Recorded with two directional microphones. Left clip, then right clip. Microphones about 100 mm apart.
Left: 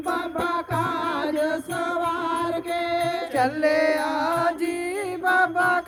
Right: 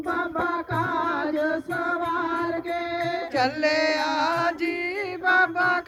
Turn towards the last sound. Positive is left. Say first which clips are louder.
# left 1 dB
turn(degrees=25)  # may be behind; listen again after turning